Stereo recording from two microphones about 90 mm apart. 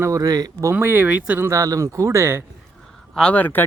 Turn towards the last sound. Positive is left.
turn(degrees=20)  # may be behind; listen again after turning